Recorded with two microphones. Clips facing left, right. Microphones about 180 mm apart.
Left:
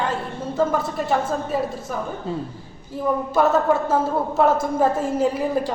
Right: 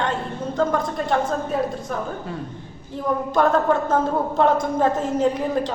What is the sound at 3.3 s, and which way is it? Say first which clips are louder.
A woman's voice: even; 5° left (ahead or behind).